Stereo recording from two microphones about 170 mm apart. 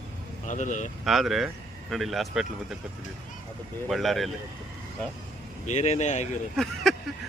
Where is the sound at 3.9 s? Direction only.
Centre (ahead or behind).